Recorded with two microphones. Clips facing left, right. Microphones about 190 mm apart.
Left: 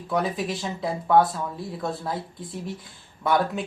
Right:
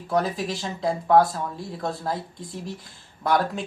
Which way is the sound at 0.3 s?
Centre (ahead or behind).